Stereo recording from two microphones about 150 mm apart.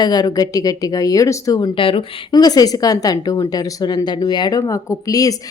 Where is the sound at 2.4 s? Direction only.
25° left (ahead or behind).